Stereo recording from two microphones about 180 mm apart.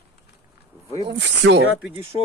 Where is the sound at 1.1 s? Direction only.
70° right (ahead or behind).